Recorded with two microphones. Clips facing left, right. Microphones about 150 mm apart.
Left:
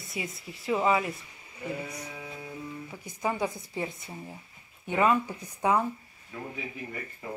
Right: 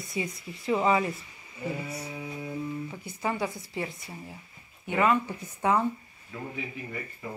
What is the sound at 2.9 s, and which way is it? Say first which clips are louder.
Speech: even; 15° left (ahead or behind).